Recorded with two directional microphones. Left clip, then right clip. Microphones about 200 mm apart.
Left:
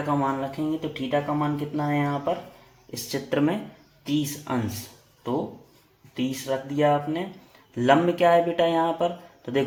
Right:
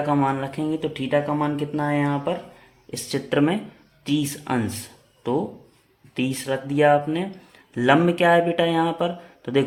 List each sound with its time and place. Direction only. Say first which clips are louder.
0.2 s speech: right 3 dB; 40° right (ahead or behind)
6.1 s speech: right 2 dB; 40° right (ahead or behind)